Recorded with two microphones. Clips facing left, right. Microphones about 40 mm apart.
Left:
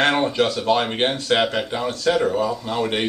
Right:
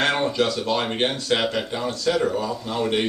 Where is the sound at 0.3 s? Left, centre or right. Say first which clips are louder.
Left 3 dB; left.